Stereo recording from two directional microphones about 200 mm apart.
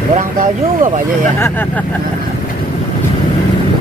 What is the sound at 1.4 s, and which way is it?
Speech, 10° left (ahead or behind).